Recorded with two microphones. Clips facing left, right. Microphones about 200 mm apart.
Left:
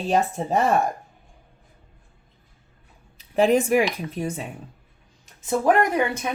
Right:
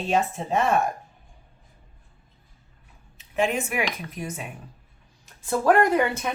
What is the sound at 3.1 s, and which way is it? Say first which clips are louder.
Speech: left 6 dB; 35° left (ahead or behind).